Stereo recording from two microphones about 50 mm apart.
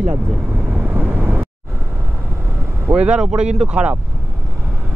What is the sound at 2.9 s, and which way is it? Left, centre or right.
Speech, right.